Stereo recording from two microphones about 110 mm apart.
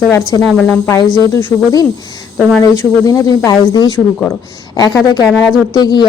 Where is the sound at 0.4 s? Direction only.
5° left (ahead or behind).